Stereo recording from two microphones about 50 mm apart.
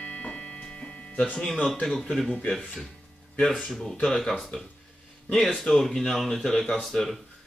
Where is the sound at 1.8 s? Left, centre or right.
Centre.